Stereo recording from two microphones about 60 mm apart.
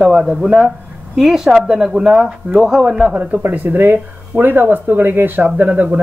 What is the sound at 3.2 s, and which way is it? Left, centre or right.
A man's voice, right.